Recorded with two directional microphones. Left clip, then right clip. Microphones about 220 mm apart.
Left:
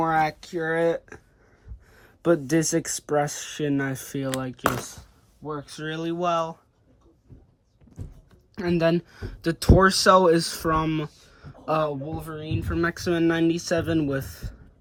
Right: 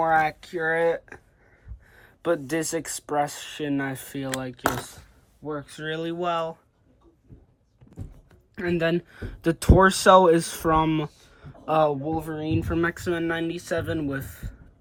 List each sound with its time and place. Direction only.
0.0 s speech: 25° left (ahead or behind)
1.9 s speech: 30° left (ahead or behind)
5.5 s speech: 10° left (ahead or behind)
8.5 s speech: 10° left (ahead or behind)